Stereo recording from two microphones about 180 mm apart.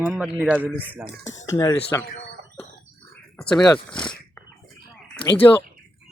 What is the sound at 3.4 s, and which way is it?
Speech, 5° left (ahead or behind).